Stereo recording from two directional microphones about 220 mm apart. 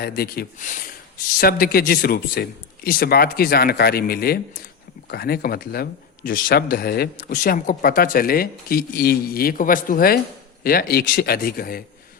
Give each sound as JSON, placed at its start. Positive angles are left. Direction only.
{"t": 0.0, "sound": "speech", "side_deg": 45}